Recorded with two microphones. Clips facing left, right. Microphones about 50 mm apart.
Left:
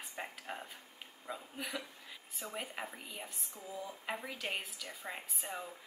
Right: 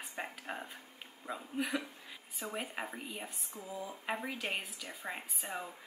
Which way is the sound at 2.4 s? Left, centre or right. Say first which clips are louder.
Right 3 dB; centre.